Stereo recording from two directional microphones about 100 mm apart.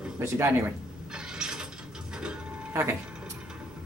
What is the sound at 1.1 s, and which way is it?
Pulleys, 5° right (ahead or behind).